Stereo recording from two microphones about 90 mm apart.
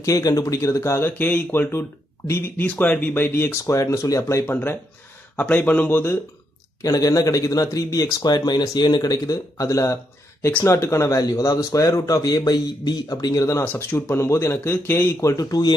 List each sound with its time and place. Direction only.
0.0 s speech: 40° left (ahead or behind)
1.1 s speech: 20° left (ahead or behind)
5.4 s speech: 15° left (ahead or behind)
6.8 s speech: 40° left (ahead or behind); by 15.2 s 25° left (ahead or behind)
15.2 s speech: 40° left (ahead or behind)